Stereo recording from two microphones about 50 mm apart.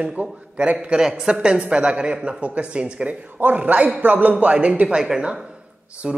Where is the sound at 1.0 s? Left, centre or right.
Centre; by 4.3 s right.